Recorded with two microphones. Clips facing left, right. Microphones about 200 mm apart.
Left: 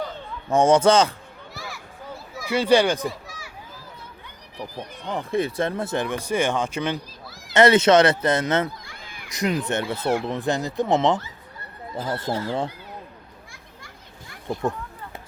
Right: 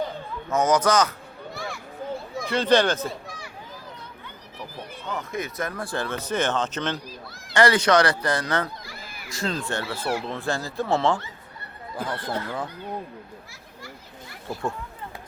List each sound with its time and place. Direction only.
0.5 s speech: 30° left (ahead or behind)
1.5 s children playing: centre (ahead or behind)
2.4 s speech: 10° left (ahead or behind)
3.1 s a sound: centre (ahead or behind)
5.0 s speech: 30° left (ahead or behind); by 7.0 s 10° left (ahead or behind)
7.3 s a sound: centre (ahead or behind)
7.5 s speech: 20° left (ahead or behind)
8.8 s a sound: 5° right (ahead or behind)
9.3 s speech: 20° left (ahead or behind)